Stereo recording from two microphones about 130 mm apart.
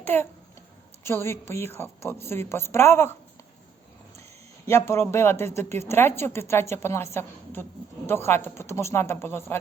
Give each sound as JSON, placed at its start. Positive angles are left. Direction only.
{"t": 0.0, "sound": "a sound", "side_deg": 15}
{"t": 1.0, "sound": "a woman's voice", "side_deg": 20}
{"t": 4.6, "sound": "a woman's voice", "side_deg": 20}